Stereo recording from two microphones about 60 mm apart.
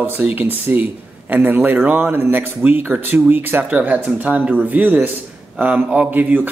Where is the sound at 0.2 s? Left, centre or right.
Right.